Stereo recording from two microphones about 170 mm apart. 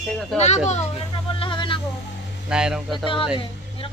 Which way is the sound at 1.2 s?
30° left (ahead or behind).